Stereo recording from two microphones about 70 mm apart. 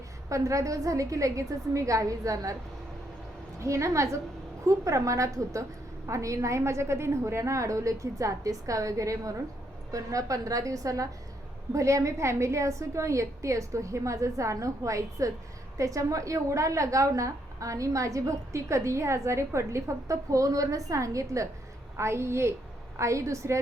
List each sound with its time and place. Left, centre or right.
0.3 s a woman's voice: right
3.6 s a woman's voice: right